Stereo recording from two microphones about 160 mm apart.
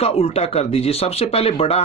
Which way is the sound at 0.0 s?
40° left (ahead or behind).